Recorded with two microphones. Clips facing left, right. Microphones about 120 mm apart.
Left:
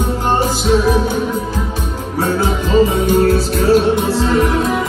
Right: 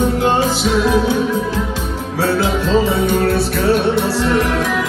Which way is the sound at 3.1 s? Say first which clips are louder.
Left 3 dB; 60° right (ahead or behind).